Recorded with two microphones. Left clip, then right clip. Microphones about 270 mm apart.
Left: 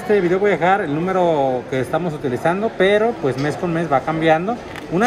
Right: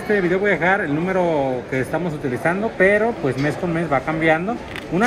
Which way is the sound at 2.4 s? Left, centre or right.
Centre.